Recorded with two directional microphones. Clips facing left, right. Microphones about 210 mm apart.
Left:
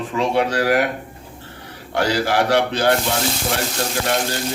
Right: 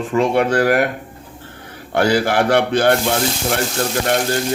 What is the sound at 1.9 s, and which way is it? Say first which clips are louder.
Speech: right 3 dB; 50° right (ahead or behind).